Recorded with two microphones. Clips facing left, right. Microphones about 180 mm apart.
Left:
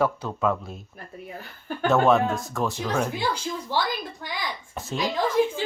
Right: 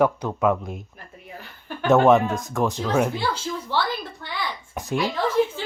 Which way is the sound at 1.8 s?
20° right (ahead or behind).